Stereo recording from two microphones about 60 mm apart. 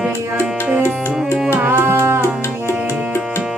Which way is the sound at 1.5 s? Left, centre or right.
Right.